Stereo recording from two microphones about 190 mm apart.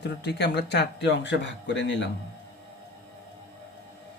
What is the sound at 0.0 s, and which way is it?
Speech, 65° left (ahead or behind).